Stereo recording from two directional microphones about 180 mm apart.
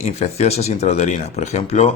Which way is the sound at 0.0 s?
35° left (ahead or behind).